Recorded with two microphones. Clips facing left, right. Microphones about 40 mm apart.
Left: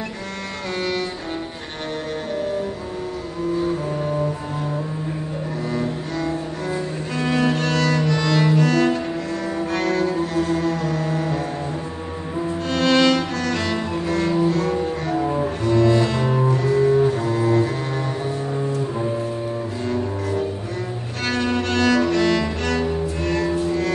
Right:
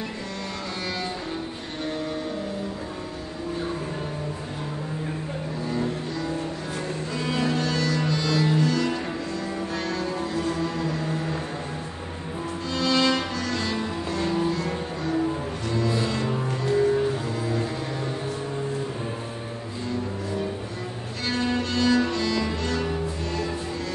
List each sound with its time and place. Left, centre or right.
5.7 s cello: left
9.8 s music: left
12.7 s cello: left
21.3 s cello: left